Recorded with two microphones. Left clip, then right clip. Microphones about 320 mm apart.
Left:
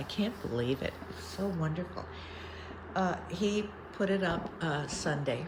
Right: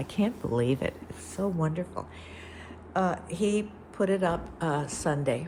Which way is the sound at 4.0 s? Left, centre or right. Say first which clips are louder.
Right 5 dB; centre.